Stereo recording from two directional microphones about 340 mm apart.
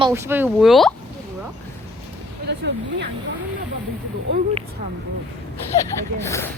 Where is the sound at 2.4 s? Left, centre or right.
Right.